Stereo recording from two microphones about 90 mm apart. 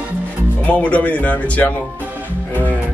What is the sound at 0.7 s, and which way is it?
Speech, 15° left (ahead or behind).